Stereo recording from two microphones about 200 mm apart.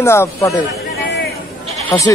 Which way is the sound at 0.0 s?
15° left (ahead or behind).